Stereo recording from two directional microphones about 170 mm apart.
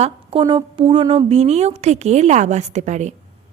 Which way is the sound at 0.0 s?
30° right (ahead or behind).